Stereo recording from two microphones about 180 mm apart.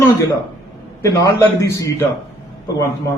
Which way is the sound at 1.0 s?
15° left (ahead or behind).